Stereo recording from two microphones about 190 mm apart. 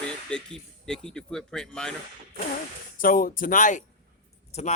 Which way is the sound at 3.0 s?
50° left (ahead or behind).